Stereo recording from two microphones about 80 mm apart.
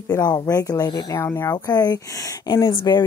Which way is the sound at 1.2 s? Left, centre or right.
Left.